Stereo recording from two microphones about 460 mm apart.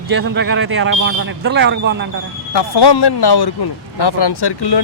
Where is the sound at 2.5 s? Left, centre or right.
Left.